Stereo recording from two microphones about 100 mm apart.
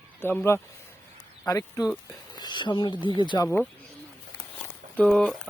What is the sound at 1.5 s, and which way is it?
Speech, 40° left (ahead or behind).